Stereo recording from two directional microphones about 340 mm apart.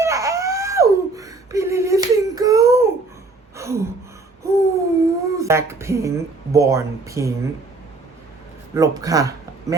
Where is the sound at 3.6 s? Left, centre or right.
Centre.